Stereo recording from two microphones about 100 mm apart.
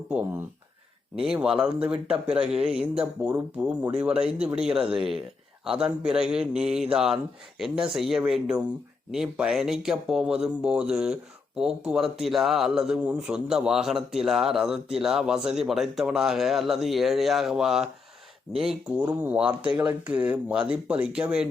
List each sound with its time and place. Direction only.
0.1 s speech: 15° right (ahead or behind)